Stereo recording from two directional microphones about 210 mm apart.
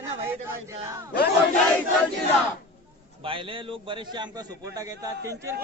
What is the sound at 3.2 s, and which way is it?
A man's voice, 25° right (ahead or behind).